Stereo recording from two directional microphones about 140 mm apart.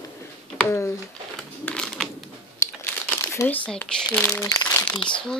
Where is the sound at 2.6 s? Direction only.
20° left (ahead or behind).